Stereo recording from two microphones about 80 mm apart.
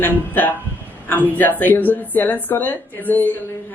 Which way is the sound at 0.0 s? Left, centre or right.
Left.